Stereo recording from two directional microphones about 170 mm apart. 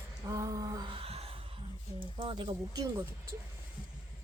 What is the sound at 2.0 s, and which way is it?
Speech, 30° right (ahead or behind).